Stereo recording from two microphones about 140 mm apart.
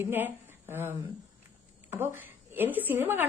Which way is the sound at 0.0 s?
15° right (ahead or behind).